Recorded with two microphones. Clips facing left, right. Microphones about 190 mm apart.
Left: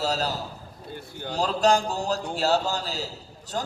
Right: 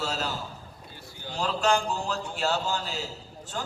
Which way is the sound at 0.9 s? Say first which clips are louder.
Left 9 dB; 55° left (ahead or behind).